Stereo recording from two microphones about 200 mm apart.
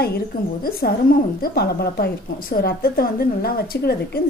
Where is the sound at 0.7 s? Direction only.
50° left (ahead or behind).